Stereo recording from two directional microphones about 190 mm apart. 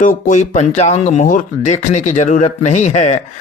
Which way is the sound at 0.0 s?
40° left (ahead or behind).